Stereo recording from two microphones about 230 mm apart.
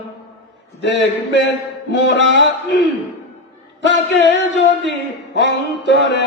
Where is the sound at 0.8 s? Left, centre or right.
Left.